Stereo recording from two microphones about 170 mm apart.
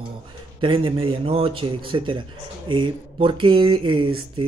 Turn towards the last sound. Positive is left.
turn(degrees=-30)  # may be behind; listen again after turning